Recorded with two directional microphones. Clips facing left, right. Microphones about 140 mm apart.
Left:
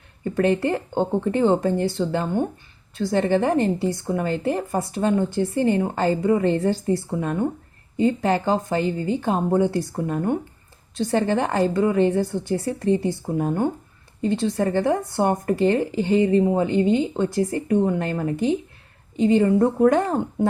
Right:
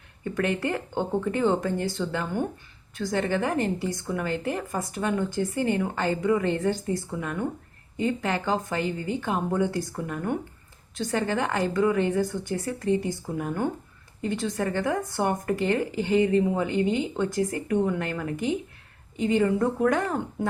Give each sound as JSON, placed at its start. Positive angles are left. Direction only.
{"t": 0.3, "sound": "a woman's voice", "side_deg": 30}